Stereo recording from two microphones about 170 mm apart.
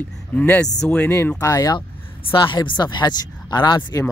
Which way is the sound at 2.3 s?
30° left (ahead or behind).